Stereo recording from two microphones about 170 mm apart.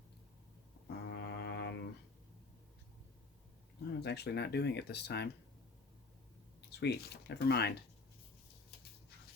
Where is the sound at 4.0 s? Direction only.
80° left.